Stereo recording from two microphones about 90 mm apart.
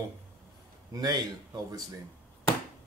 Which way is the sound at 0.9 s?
45° right (ahead or behind).